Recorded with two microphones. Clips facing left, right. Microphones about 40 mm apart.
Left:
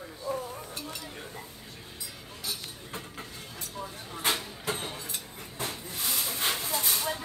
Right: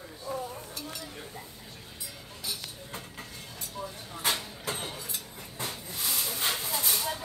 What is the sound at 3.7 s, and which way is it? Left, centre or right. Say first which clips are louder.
Vehicle: even; centre.